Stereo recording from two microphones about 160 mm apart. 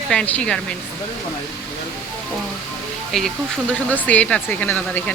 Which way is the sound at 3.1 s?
5° left (ahead or behind).